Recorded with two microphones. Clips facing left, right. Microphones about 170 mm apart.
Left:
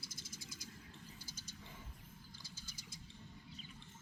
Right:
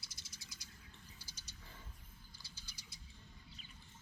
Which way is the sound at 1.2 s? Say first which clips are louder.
Left 5 dB; 50° left (ahead or behind).